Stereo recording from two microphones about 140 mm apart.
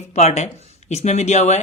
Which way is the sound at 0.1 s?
50° left (ahead or behind).